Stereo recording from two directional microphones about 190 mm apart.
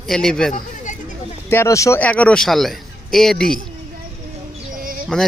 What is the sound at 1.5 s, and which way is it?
A man's voice, 15° left (ahead or behind).